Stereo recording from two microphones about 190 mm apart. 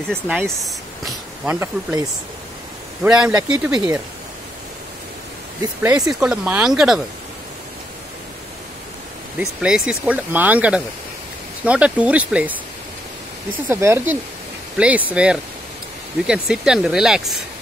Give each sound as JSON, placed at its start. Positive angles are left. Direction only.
{"t": 0.6, "sound": "speech", "side_deg": 0}
{"t": 5.8, "sound": "speech", "side_deg": -10}
{"t": 9.4, "sound": "speech", "side_deg": -5}
{"t": 13.7, "sound": "speech", "side_deg": -10}